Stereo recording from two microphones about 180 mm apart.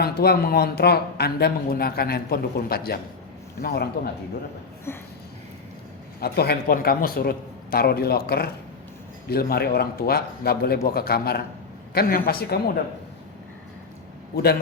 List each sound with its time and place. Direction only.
0.0 s speech: 60° left (ahead or behind)
4.9 s a sound: 15° left (ahead or behind)
6.1 s speech: 60° left (ahead or behind)